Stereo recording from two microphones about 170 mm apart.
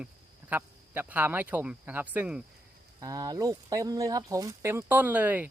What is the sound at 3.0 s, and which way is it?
Speech, 20° right (ahead or behind).